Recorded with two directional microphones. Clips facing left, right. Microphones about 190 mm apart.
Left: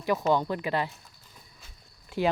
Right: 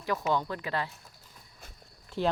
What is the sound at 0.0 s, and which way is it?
Speech, 15° left (ahead or behind).